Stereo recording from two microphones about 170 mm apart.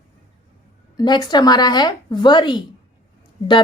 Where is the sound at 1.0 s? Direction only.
25° left (ahead or behind).